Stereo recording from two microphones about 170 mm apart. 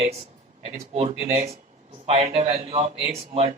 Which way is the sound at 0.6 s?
40° right (ahead or behind).